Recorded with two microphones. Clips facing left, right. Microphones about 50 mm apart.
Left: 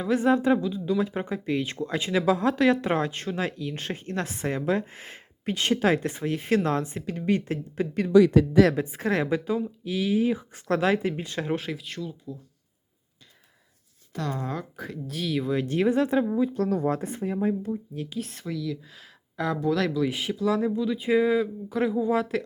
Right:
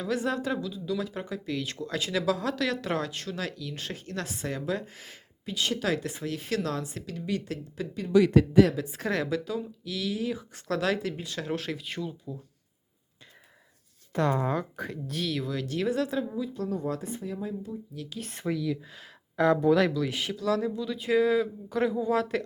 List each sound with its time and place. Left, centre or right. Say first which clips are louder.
0.0 s speech: left 7 dB; left
8.9 s speech: left 4 dB; centre
11.7 s speech: even; centre
14.1 s speech: right 5 dB; right
14.4 s speech: right 3 dB; centre
15.4 s speech: left 5 dB; left
16.6 s speech: left 6 dB; left
16.8 s speech: left 5 dB; left
18.2 s speech: left 5 dB; centre
18.4 s speech: right 5 dB; centre
18.9 s speech: right 1 dB; centre
19.9 s speech: left 3 dB; centre